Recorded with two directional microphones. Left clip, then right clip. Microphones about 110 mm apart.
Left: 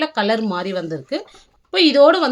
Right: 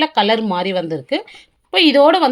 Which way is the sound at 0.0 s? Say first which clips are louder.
Right 4 dB; 25° right (ahead or behind).